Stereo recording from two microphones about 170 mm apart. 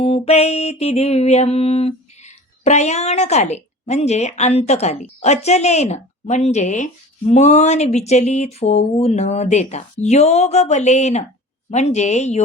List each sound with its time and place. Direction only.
0.0 s mantra: 35° left (ahead or behind)